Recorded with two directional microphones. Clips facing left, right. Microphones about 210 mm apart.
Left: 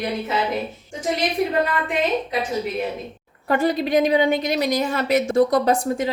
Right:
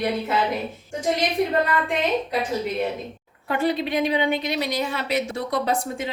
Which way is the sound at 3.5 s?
45° left (ahead or behind).